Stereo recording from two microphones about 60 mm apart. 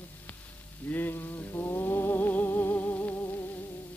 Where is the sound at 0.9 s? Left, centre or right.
Left.